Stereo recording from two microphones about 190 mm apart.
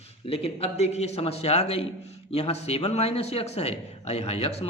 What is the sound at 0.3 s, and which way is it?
A man's voice, 30° left (ahead or behind).